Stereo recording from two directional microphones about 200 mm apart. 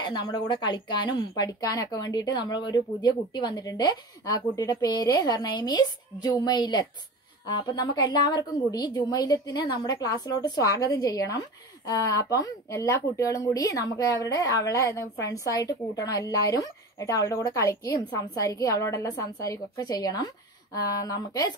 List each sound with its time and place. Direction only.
0.0 s a woman's voice: 20° left (ahead or behind)